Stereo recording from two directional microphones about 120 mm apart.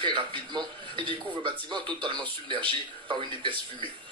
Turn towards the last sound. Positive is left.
turn(degrees=-40)  # may be behind; listen again after turning